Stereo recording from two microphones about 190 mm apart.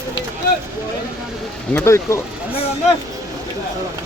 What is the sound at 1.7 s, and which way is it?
Speech, 15° left (ahead or behind).